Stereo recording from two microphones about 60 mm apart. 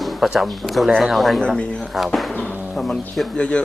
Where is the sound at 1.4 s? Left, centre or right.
Centre.